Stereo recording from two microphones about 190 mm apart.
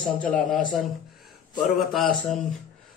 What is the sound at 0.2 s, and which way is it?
Speech, 5° left (ahead or behind).